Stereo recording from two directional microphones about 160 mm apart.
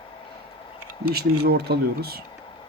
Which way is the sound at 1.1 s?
80° right.